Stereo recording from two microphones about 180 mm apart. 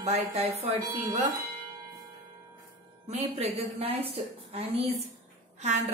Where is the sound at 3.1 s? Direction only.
35° right (ahead or behind).